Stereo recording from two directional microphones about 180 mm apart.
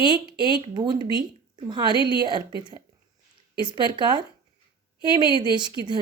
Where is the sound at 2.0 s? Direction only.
25° left (ahead or behind).